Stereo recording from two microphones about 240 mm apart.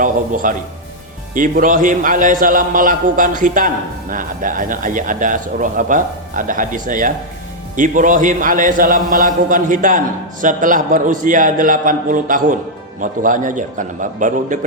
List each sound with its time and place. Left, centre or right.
0.4 s a man's voice: right